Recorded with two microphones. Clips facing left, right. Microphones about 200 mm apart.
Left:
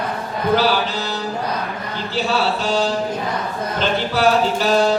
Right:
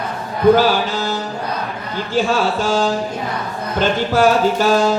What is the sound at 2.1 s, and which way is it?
Mantra, 45° right (ahead or behind).